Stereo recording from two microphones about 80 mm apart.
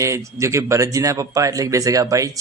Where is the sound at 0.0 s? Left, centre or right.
Right.